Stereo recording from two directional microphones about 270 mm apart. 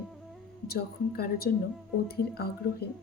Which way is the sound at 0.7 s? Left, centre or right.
Left.